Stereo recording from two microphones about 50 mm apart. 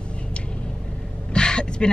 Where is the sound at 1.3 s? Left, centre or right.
Centre.